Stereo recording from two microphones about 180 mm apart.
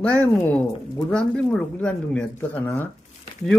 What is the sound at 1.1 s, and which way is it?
Speech, 5° left (ahead or behind).